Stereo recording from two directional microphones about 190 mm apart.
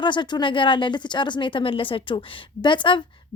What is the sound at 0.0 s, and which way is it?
Speech, 25° left (ahead or behind).